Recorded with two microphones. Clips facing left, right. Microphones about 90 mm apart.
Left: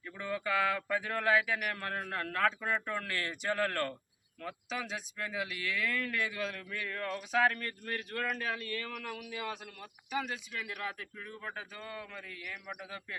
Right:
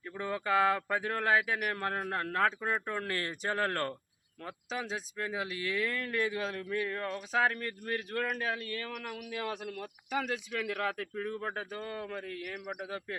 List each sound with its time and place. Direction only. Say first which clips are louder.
0.2 s speech: right 3 dB; 35° right (ahead or behind)
10.1 s speech: right 3 dB; 90° right; by 12.5 s 45° right (ahead or behind)